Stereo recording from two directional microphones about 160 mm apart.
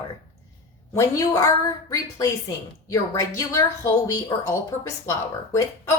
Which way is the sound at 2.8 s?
20° left (ahead or behind).